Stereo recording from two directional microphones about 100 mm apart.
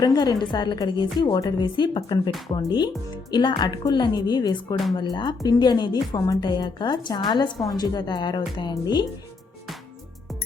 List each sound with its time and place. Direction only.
0.0 s speech: 45° left (ahead or behind)
6.1 s a woman's voice: 35° left (ahead or behind)
6.4 s speech: 45° left (ahead or behind)